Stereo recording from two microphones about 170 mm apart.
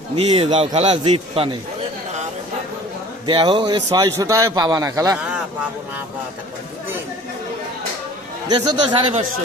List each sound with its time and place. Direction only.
0.2 s speech: 35° right (ahead or behind)
3.2 s a man's voice: 30° right (ahead or behind)
8.4 s a man's voice: 25° right (ahead or behind)